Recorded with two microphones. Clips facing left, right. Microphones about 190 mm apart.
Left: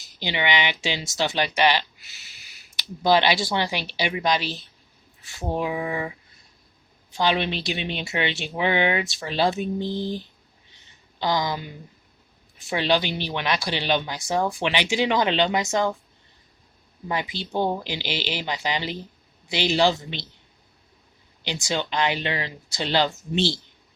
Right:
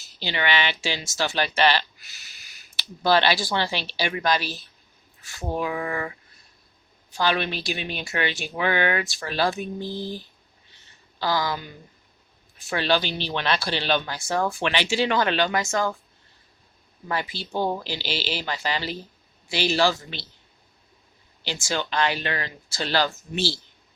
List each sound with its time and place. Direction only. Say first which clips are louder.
0.2 s speech: left 1 dB; 15° left (ahead or behind)
7.2 s speech: left 1 dB; 20° left (ahead or behind)
17.1 s speech: left 1 dB; 20° left (ahead or behind)
21.4 s speech: left 1 dB; 20° left (ahead or behind)